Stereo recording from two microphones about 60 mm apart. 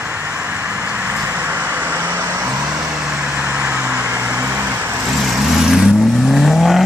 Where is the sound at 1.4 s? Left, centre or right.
Right.